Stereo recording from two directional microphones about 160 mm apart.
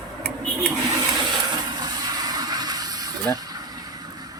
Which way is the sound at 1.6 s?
25° right (ahead or behind).